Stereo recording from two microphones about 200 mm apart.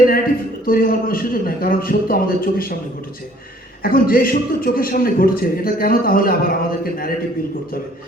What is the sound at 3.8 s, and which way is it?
A man's voice, 45° left (ahead or behind).